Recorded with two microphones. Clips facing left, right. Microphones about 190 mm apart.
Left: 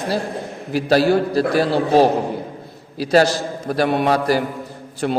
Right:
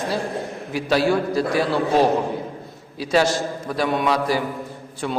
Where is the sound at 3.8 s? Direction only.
60° left (ahead or behind).